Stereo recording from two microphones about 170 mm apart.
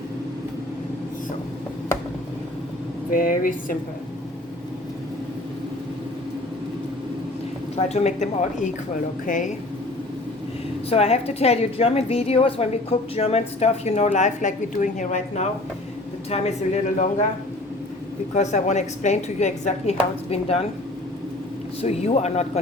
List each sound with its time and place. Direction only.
3.1 s a woman's voice: 55° left (ahead or behind)
7.8 s a woman's voice: 40° left (ahead or behind)
10.8 s a woman's voice: 40° left (ahead or behind)
18.3 s a woman's voice: 45° left (ahead or behind)
21.8 s a woman's voice: 35° left (ahead or behind)